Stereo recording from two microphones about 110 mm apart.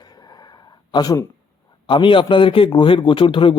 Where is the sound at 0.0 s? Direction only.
40° left (ahead or behind).